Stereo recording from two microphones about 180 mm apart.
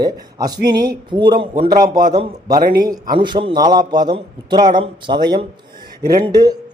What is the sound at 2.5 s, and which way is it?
Speech, 55° right (ahead or behind).